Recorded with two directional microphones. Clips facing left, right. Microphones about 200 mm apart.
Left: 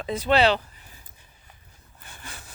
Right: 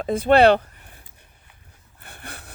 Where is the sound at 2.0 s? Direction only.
60° right (ahead or behind).